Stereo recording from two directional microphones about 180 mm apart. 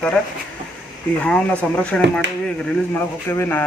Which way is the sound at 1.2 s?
5° left (ahead or behind).